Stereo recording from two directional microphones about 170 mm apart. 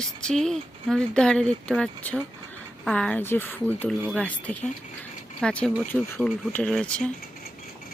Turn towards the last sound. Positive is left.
turn(degrees=5)  # may be behind; listen again after turning